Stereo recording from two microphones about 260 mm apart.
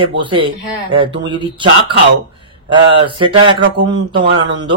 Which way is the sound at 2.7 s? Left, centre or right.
Centre.